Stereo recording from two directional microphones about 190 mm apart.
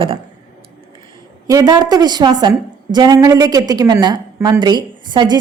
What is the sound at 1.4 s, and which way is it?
A woman's voice, 20° right (ahead or behind).